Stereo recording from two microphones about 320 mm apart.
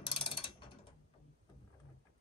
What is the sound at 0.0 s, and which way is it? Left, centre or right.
Ratchet, centre.